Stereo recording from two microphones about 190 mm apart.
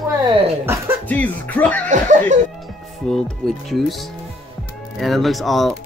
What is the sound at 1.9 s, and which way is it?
Laughter, 40° right (ahead or behind).